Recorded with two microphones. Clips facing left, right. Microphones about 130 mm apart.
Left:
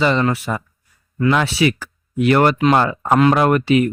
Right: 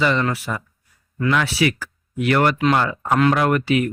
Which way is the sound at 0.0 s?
25° left (ahead or behind).